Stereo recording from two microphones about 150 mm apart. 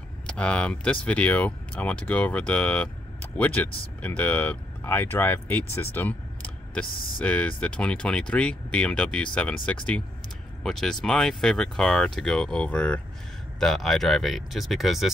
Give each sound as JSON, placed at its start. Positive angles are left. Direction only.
{"t": 0.3, "sound": "speech", "side_deg": 5}